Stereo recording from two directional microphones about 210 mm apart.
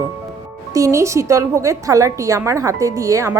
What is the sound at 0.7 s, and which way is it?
Speech, 15° right (ahead or behind).